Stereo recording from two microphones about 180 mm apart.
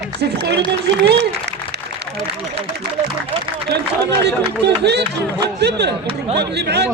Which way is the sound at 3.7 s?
65° right (ahead or behind).